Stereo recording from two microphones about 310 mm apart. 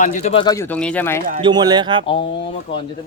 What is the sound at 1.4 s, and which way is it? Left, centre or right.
Speech, centre.